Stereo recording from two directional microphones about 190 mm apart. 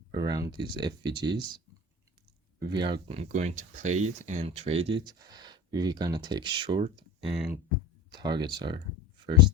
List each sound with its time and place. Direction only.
0.1 s speech: 20° right (ahead or behind)